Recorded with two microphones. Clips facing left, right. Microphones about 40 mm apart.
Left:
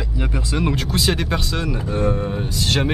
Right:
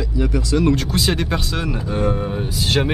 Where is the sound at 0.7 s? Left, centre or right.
Centre.